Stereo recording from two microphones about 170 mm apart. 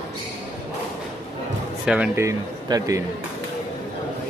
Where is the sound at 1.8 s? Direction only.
5° right (ahead or behind).